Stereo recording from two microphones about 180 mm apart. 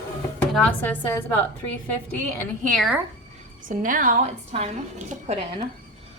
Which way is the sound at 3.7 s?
50° right (ahead or behind).